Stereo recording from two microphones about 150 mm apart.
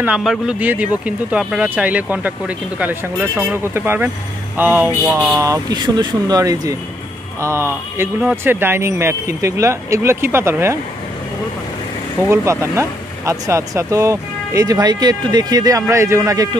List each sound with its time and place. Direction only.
0.0 s speech: 5° right (ahead or behind)
5.4 s speech: 25° right (ahead or behind)
12.3 s speech: 20° right (ahead or behind)